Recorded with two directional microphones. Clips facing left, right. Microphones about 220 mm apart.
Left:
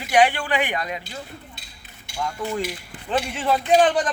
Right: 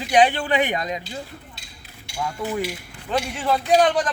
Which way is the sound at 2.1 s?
5° right (ahead or behind).